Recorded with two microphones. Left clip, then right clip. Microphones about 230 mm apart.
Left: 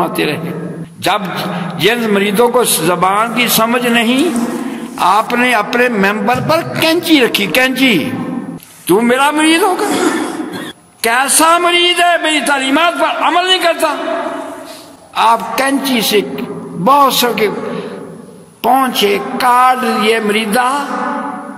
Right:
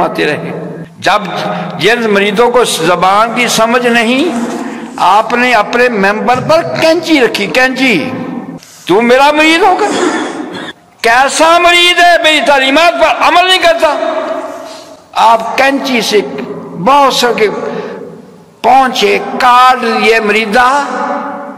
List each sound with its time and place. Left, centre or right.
0.0 s a man's voice: left
11.0 s a man's voice: left
15.1 s a man's voice: left